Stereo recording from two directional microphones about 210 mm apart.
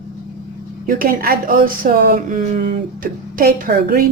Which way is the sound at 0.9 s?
45° right (ahead or behind).